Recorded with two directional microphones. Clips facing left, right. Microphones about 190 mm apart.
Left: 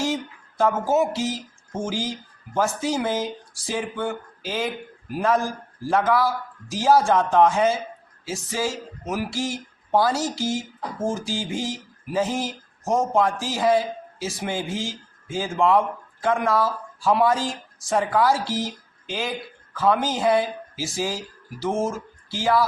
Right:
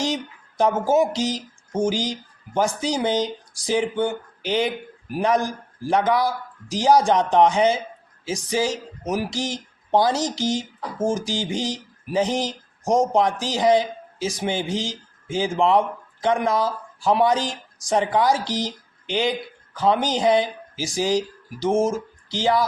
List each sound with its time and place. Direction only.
0.0 s speech: 15° right (ahead or behind)